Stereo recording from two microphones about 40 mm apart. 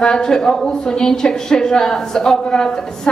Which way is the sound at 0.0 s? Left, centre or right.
Centre.